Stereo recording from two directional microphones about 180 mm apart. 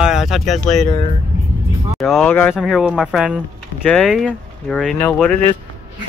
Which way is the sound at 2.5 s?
Centre (ahead or behind).